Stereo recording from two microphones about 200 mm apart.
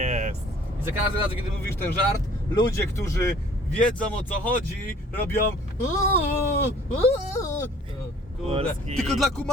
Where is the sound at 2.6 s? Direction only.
15° left (ahead or behind).